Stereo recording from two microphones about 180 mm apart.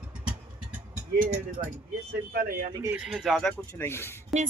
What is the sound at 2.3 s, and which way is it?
Speech, 55° right (ahead or behind).